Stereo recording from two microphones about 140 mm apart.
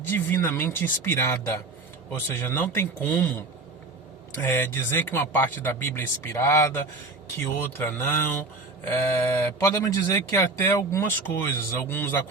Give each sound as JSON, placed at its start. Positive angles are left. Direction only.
{"t": 0.1, "sound": "speech", "side_deg": 15}